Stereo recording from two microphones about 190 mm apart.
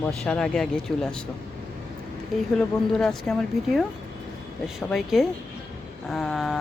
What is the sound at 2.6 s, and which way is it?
Speech, 5° left (ahead or behind).